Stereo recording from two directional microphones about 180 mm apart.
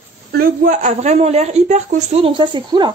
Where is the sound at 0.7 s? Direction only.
40° right (ahead or behind).